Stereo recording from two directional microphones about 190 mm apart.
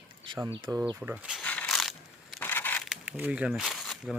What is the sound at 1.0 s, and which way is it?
Speech, 10° right (ahead or behind).